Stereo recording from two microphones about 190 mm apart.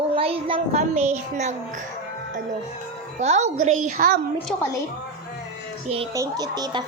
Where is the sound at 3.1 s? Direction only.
35° right (ahead or behind).